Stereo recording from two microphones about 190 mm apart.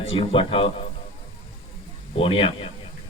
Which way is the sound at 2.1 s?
30° left (ahead or behind).